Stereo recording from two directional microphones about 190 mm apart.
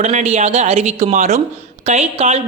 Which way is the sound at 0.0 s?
35° right (ahead or behind).